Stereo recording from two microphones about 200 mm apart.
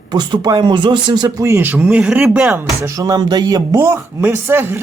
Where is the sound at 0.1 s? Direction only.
20° right (ahead or behind).